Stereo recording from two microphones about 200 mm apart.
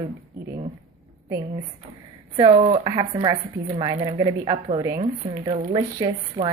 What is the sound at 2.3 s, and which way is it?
Speech, 25° right (ahead or behind).